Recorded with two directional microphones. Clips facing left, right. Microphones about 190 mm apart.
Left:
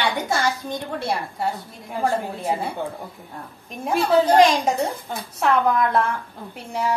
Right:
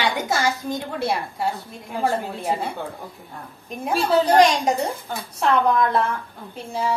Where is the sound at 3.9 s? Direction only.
20° left (ahead or behind).